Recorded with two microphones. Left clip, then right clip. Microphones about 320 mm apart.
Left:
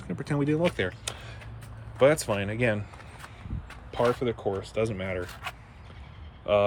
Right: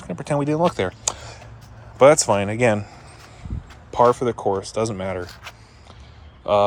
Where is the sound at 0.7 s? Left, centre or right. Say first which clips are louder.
Right 7 dB; centre.